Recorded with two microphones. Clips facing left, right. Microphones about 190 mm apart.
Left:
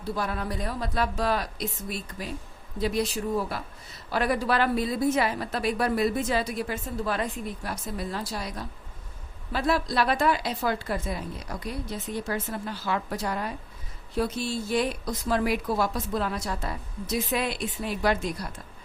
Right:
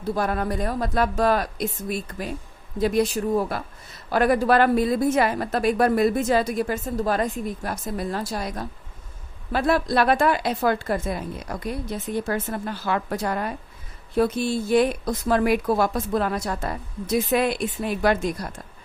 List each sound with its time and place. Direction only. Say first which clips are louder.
0.1 s speech: right 6 dB; 50° right (ahead or behind)